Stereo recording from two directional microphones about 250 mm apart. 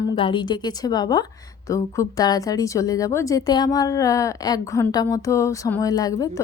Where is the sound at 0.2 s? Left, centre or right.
Centre.